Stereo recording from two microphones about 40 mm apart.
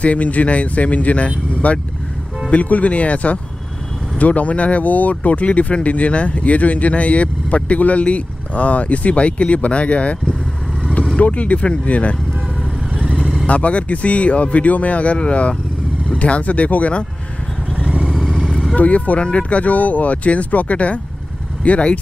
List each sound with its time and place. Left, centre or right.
0.0 s speech: left
11.1 s speech: left
12.9 s vehicle: right
13.2 s vehicle: centre
13.5 s speech: left
17.7 s vehicle: right
18.8 s speech: left